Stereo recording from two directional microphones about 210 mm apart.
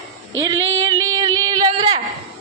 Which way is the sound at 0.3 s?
15° right (ahead or behind).